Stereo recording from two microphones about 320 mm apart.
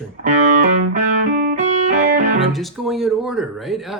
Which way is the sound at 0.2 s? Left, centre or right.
Right.